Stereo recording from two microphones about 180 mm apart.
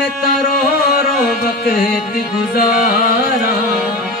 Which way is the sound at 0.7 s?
55° left (ahead or behind).